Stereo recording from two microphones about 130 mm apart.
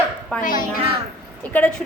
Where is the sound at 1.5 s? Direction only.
10° left (ahead or behind).